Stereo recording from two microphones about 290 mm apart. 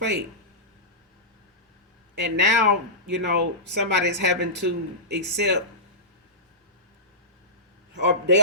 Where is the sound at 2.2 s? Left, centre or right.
Right.